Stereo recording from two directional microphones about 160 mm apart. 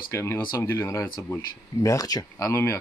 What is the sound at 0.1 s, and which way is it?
Speech, 15° left (ahead or behind).